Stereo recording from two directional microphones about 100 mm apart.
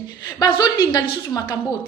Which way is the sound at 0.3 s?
40° left (ahead or behind).